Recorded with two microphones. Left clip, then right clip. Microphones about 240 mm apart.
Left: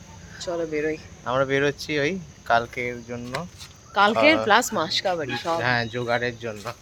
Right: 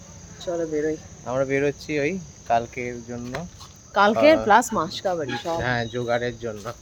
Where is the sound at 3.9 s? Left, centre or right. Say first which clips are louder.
Right 1 dB; right.